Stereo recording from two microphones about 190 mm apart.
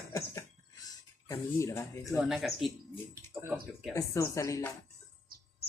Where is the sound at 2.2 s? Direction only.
Centre (ahead or behind).